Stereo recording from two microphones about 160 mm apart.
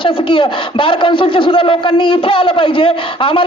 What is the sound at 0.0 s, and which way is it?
Speech, 30° left (ahead or behind).